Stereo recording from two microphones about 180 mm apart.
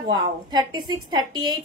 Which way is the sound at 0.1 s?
25° right (ahead or behind).